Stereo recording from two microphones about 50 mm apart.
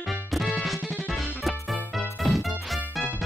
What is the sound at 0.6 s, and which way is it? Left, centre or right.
Music, centre.